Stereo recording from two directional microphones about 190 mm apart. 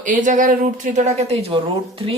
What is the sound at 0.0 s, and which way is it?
Speech, 45° right (ahead or behind).